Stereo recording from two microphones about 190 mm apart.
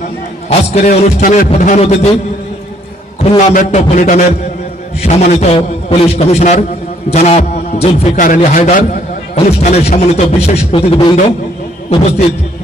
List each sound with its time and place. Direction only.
0.5 s speech: 35° left (ahead or behind)
3.3 s speech: 40° left (ahead or behind)